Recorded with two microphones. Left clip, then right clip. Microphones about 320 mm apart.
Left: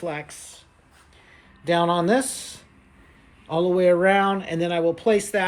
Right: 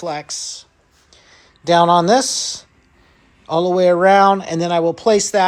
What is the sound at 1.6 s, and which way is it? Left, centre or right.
Speech, centre.